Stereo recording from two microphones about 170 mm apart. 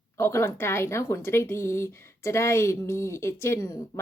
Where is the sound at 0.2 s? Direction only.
15° left (ahead or behind).